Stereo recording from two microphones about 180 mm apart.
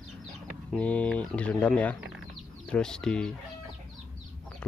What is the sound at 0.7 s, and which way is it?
Speech, 5° left (ahead or behind).